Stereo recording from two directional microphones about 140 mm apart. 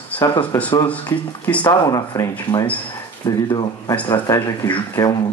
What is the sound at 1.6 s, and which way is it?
Speech, 25° left (ahead or behind).